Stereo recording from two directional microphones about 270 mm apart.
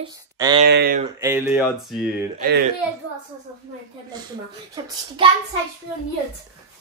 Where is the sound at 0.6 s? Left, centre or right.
Right.